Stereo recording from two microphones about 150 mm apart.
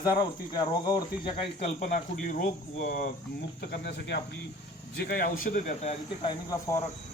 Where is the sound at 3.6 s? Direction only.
90° left; by 5.7 s 65° left (ahead or behind).